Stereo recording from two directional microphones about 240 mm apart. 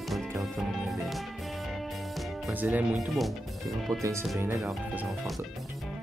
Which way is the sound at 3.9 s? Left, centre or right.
Centre.